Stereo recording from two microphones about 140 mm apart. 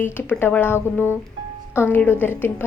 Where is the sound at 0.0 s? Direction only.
15° left (ahead or behind).